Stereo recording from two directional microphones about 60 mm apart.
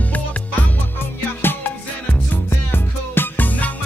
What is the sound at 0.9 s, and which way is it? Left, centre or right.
Music, left.